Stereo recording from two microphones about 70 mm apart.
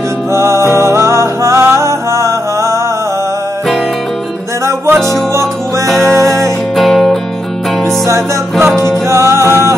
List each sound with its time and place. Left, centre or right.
0.3 s music: right
5.0 s music: right
6.7 s music: centre
7.8 s music: right